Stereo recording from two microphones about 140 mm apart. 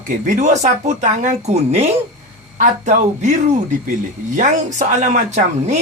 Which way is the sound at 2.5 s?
60° right (ahead or behind).